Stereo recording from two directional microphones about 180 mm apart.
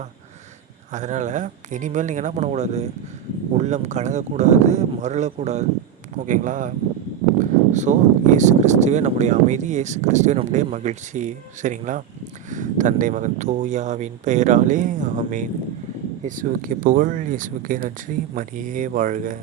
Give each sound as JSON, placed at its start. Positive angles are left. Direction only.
{"t": 0.9, "sound": "speech", "side_deg": -40}